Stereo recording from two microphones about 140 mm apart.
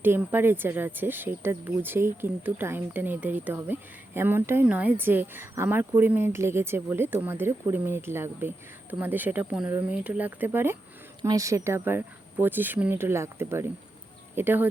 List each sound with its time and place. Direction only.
0.0 s speech: 15° right (ahead or behind)